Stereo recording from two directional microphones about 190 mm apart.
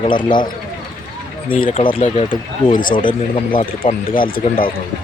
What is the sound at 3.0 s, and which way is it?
Speech, 25° left (ahead or behind).